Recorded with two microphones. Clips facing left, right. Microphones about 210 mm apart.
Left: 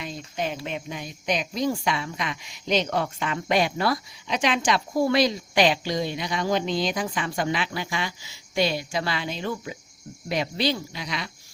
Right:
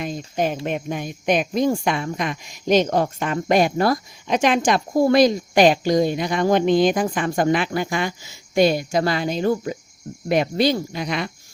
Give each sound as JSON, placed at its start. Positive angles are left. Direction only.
{"t": 0.3, "sound": "speech", "side_deg": -50}